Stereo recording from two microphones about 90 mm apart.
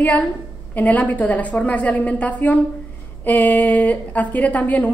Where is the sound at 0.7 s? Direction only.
15° left (ahead or behind).